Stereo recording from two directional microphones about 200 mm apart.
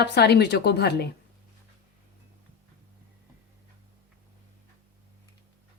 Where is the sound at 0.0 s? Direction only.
55° left (ahead or behind).